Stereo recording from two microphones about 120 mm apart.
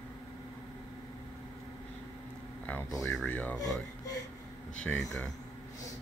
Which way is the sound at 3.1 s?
10° left (ahead or behind).